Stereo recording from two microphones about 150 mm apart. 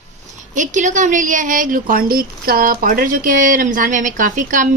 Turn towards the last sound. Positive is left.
turn(degrees=-60)  # may be behind; listen again after turning